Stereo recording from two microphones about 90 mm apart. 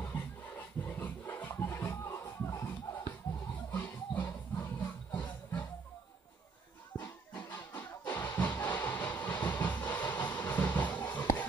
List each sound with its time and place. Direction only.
0.0 s a sound: 20° left (ahead or behind)
3.1 s music: 30° left (ahead or behind)
7.0 s music: 20° left (ahead or behind)
8.1 s train: 20° left (ahead or behind)